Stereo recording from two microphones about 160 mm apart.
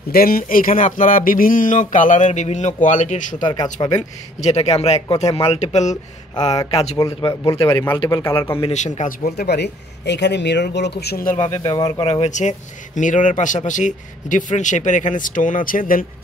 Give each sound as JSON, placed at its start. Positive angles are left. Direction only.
{"t": 0.1, "sound": "a man's voice", "side_deg": 65}
{"t": 6.3, "sound": "speech", "side_deg": 25}
{"t": 6.7, "sound": "a man's voice", "side_deg": 40}
{"t": 7.2, "sound": "a man's voice", "side_deg": 20}
{"t": 8.5, "sound": "speech", "side_deg": 40}
{"t": 11.3, "sound": "speech", "side_deg": 20}
{"t": 12.1, "sound": "a man's voice", "side_deg": 45}